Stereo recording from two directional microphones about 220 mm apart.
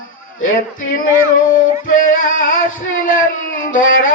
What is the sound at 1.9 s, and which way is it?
Female singing, 35° left (ahead or behind).